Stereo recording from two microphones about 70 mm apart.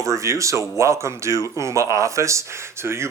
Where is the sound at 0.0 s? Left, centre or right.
Right.